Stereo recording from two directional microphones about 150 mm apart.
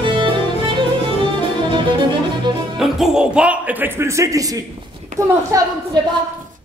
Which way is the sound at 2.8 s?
5° right (ahead or behind).